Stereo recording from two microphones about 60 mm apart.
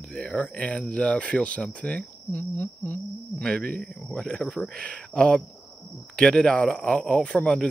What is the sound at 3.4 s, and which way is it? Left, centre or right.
Speech, centre.